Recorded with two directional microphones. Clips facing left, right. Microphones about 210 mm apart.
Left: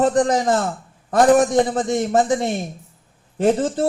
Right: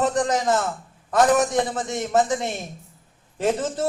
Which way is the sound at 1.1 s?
30° left (ahead or behind).